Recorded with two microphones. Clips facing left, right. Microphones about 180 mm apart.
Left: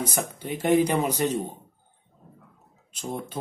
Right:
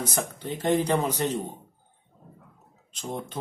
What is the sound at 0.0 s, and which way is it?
Speech, 10° left (ahead or behind).